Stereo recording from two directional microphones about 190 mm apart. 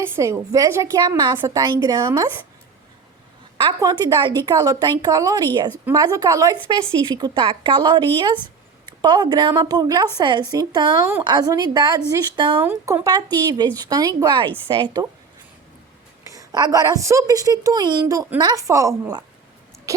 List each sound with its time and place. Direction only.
0.0 s a woman's voice: 15° right (ahead or behind)
3.6 s a woman's voice: 20° right (ahead or behind)
16.2 s a woman's voice: 20° right (ahead or behind)